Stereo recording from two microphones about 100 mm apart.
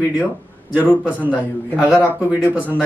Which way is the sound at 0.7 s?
15° right (ahead or behind).